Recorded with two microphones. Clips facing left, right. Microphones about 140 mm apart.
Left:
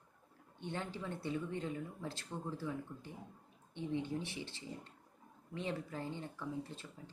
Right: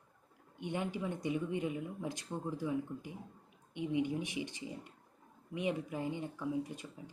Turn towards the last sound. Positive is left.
turn(degrees=-15)  # may be behind; listen again after turning